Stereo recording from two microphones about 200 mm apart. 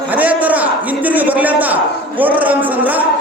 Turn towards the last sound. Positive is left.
turn(degrees=-10)  # may be behind; listen again after turning